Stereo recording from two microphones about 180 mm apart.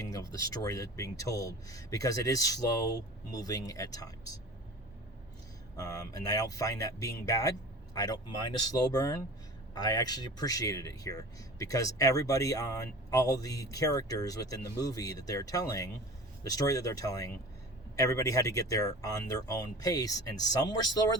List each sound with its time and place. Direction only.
0.1 s speech: 20° left (ahead or behind)
5.7 s speech: 20° left (ahead or behind)